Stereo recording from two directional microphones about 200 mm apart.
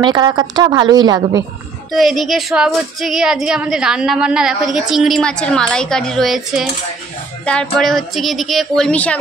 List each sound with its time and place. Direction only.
0.0 s a woman's voice: 20° right (ahead or behind)
1.9 s speech: centre (ahead or behind)